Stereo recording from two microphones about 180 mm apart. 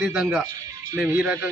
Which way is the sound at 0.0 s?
Centre (ahead or behind).